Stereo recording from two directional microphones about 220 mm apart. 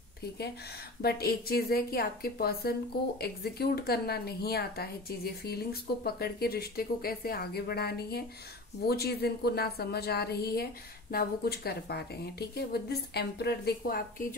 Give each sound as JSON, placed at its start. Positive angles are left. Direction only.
{"t": 1.0, "sound": "a woman's voice", "side_deg": 45}